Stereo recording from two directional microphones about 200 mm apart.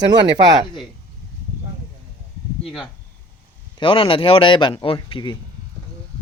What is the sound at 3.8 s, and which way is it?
Speech, 25° left (ahead or behind).